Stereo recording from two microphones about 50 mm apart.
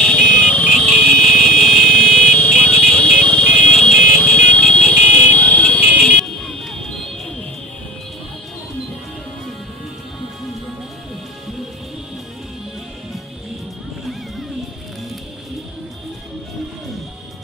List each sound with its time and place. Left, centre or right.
0.0 s music: centre
0.7 s vehicle: centre
2.7 s music: centre
3.3 s vehicle: left
3.7 s vehicle: centre
4.2 s music: left
5.9 s music: centre